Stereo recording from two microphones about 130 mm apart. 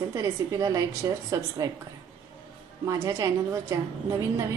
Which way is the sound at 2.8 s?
25° right (ahead or behind).